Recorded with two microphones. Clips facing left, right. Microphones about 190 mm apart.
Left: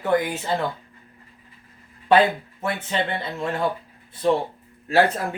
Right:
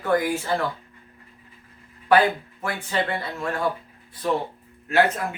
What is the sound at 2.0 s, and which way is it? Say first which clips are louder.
Speech: left 1 dB; 25° left (ahead or behind).